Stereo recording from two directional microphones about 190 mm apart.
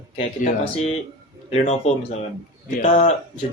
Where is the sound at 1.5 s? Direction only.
35° left (ahead or behind).